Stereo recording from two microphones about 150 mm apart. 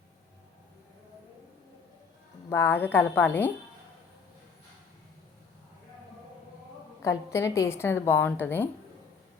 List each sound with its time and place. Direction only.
2.5 s a woman's voice: 15° left (ahead or behind)
7.0 s a woman's voice: 20° left (ahead or behind)